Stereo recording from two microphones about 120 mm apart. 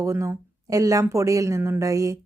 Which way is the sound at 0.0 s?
25° right (ahead or behind).